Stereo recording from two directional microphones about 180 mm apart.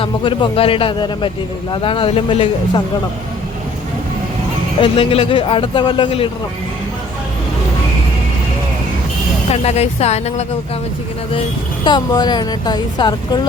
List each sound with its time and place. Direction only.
0.0 s speech: 30° left (ahead or behind)
4.8 s speech: 30° left (ahead or behind)
9.5 s speech: 35° left (ahead or behind)
11.9 s speech: 25° left (ahead or behind)